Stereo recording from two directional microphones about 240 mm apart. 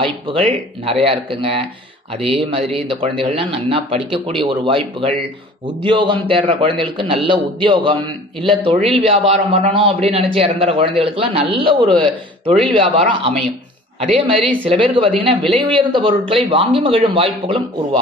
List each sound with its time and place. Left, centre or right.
0.0 s a man's voice: right
2.4 s a man's voice: right
14.7 s a man's voice: right